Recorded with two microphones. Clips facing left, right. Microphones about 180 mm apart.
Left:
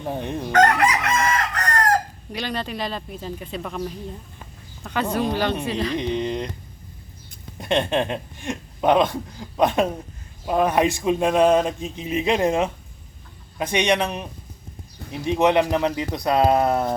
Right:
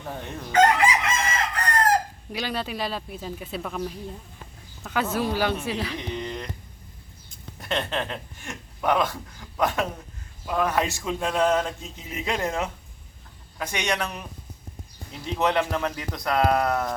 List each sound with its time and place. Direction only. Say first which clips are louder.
0.0 s speech: left 7 dB; 20° left (ahead or behind)
0.5 s chicken: left 1 dB; 65° left (ahead or behind)
2.3 s speech: left 1 dB; 5° right (ahead or behind)
6.0 s speech: left 8 dB; 20° left (ahead or behind)
7.6 s speech: left 7 dB; 25° left (ahead or behind)